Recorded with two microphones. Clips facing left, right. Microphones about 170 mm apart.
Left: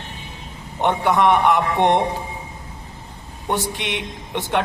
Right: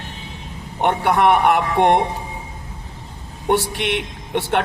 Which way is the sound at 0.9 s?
60° right (ahead or behind).